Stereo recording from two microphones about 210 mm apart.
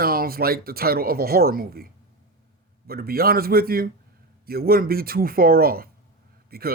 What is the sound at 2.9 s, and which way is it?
Speech, 45° right (ahead or behind).